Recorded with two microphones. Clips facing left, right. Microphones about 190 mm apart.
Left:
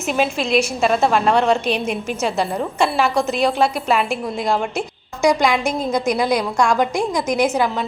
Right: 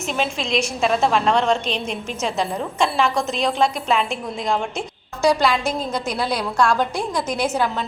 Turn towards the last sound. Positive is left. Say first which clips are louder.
# left 4 dB
turn(degrees=10)  # may be behind; listen again after turning